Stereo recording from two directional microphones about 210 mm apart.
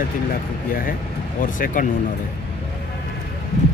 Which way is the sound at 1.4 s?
40° left (ahead or behind).